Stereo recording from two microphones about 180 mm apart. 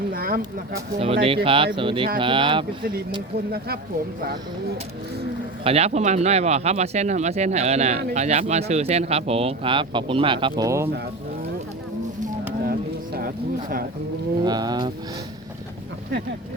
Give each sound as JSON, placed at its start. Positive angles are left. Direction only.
{"t": 0.1, "sound": "speech", "side_deg": -55}
{"t": 0.9, "sound": "speech", "side_deg": -30}
{"t": 3.3, "sound": "speech", "side_deg": -60}
{"t": 5.6, "sound": "speech", "side_deg": -35}
{"t": 13.1, "sound": "speech", "side_deg": -55}
{"t": 14.4, "sound": "speech", "side_deg": -20}